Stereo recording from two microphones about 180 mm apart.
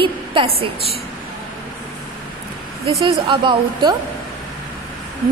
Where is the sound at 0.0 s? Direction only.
30° right (ahead or behind).